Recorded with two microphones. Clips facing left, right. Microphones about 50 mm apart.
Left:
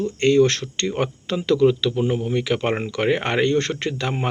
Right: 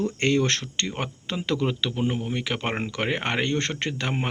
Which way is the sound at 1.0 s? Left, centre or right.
Centre.